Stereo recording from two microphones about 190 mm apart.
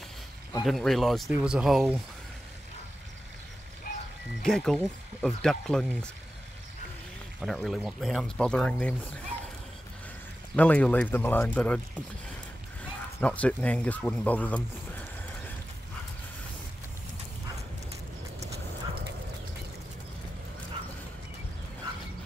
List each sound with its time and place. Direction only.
0.7 s speech: centre (ahead or behind)
3.9 s music: 50° left (ahead or behind)
4.4 s speech: centre (ahead or behind)
7.3 s speech: centre (ahead or behind)
10.5 s speech: 5° left (ahead or behind)
13.2 s speech: 5° left (ahead or behind)